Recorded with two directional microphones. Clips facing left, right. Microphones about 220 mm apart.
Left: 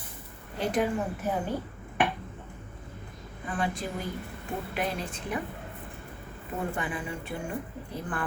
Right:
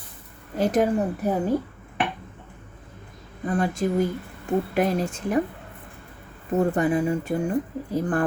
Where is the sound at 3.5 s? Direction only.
40° right (ahead or behind).